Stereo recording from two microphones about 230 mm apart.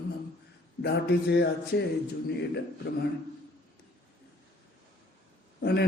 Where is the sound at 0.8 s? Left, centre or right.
Left.